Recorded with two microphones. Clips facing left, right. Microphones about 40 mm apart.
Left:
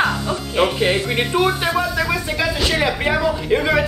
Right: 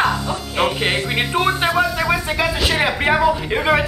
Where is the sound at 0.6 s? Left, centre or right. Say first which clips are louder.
Left 1 dB; centre.